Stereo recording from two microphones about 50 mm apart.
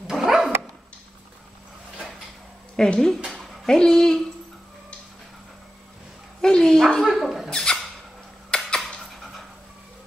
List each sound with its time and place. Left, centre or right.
0.0 s dog: centre
2.7 s a child's voice: centre
6.4 s dog: centre
7.4 s a sound: centre
8.5 s cutlery: centre